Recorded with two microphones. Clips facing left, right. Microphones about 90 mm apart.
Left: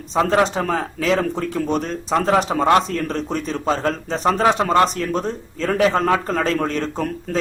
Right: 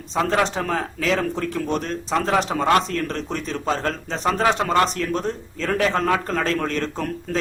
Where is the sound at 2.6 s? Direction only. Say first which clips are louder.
Left 3 dB; 20° left (ahead or behind).